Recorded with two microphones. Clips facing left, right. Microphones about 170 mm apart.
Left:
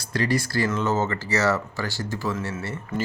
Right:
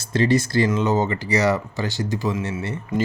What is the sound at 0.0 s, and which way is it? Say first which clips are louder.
Speech: right 5 dB; 25° right (ahead or behind).